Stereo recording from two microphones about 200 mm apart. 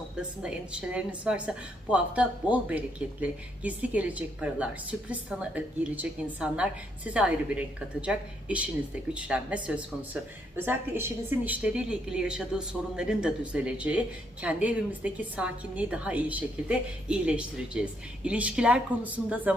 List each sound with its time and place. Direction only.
0.2 s a woman's voice: 5° right (ahead or behind)